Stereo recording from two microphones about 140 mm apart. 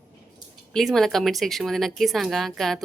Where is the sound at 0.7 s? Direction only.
Centre (ahead or behind).